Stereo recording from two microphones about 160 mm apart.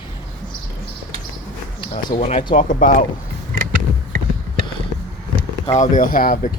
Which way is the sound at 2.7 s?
55° left (ahead or behind).